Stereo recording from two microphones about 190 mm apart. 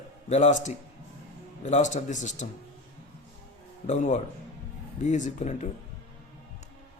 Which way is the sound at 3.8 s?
40° left (ahead or behind).